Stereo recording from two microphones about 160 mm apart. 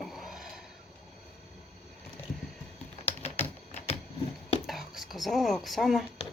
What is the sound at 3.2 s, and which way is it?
Typing, 40° left (ahead or behind).